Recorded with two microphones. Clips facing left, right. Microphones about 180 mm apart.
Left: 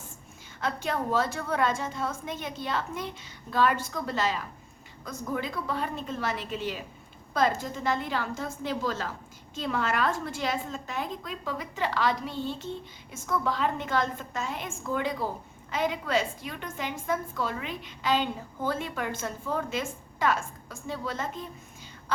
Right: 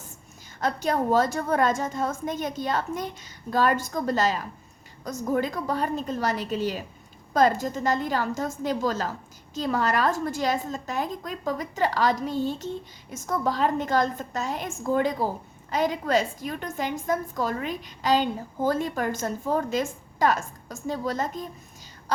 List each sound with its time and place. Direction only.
0.6 s a woman's voice: 40° right (ahead or behind)